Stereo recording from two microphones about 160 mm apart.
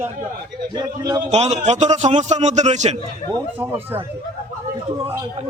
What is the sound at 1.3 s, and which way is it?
A man's voice, 45° right (ahead or behind).